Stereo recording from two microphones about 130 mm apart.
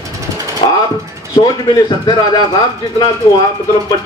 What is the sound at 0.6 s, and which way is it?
Speech, 40° left (ahead or behind).